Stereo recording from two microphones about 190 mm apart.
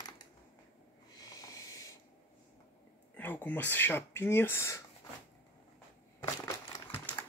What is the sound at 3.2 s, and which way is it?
Speech, 10° left (ahead or behind).